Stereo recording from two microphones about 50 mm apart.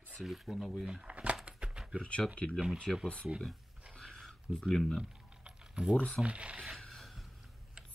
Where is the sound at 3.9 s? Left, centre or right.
Centre.